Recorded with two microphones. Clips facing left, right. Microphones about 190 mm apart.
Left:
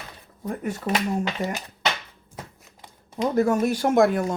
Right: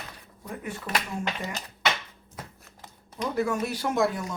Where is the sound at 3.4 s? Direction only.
45° left (ahead or behind).